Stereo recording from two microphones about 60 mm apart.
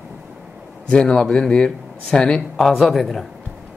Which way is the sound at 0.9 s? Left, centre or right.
Centre.